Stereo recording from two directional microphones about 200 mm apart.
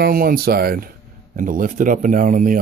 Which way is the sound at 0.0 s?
45° right (ahead or behind).